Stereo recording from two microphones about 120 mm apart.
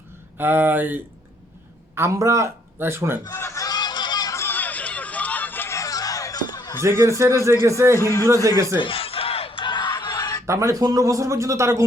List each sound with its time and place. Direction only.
0.3 s speech: 15° right (ahead or behind)
2.0 s speech: 25° right (ahead or behind)
3.3 s a sound: 25° left (ahead or behind)
6.8 s speech: 20° right (ahead or behind)
7.9 s a man's voice: 25° left (ahead or behind)
8.3 s speech: 25° right (ahead or behind)
8.8 s a sound: 50° left (ahead or behind); by 10.4 s 35° left (ahead or behind)
10.4 s speech: 25° right (ahead or behind)